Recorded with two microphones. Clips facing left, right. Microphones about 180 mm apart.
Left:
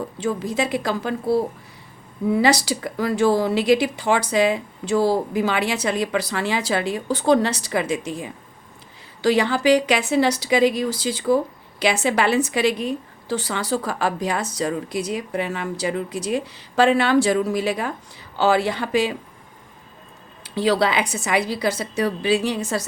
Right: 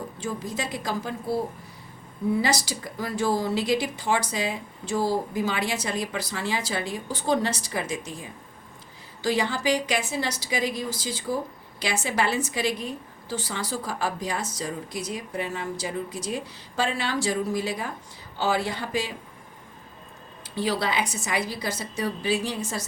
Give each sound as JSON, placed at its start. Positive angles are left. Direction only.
{"t": 0.2, "sound": "a woman's voice", "side_deg": 65}
{"t": 20.4, "sound": "a woman's voice", "side_deg": 75}